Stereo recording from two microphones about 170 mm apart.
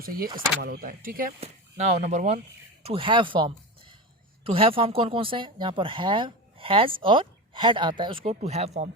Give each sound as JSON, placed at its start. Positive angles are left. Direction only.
{"t": 0.6, "sound": "speech", "side_deg": -60}
{"t": 1.4, "sound": "speech", "side_deg": -40}
{"t": 2.8, "sound": "speech", "side_deg": -30}
{"t": 8.2, "sound": "speech", "side_deg": -40}